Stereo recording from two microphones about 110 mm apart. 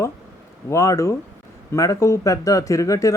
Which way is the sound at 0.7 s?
25° left (ahead or behind).